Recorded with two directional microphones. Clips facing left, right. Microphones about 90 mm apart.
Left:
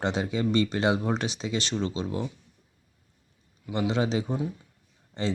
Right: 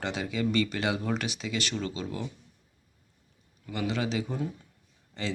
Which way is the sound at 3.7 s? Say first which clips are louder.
Left 4 dB; 25° left (ahead or behind).